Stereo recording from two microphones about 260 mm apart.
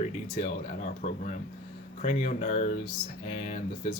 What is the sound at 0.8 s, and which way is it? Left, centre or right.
Speech, left.